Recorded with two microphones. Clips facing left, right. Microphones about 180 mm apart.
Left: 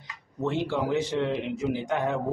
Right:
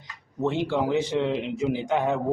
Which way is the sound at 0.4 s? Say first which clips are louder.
Right 3 dB; 20° right (ahead or behind).